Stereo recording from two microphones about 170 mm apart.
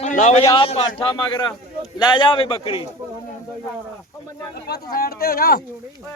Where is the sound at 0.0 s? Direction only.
45° left (ahead or behind).